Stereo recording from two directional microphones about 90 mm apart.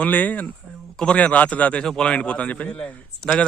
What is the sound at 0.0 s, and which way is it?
A man's voice, 20° left (ahead or behind).